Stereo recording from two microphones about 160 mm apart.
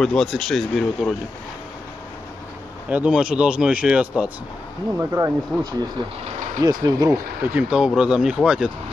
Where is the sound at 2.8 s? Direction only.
10° right (ahead or behind).